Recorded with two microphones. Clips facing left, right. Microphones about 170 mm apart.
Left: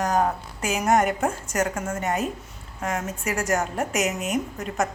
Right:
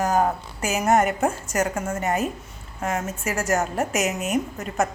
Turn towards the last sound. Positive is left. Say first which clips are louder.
# right 2 dB
turn(degrees=-5)  # may be behind; listen again after turning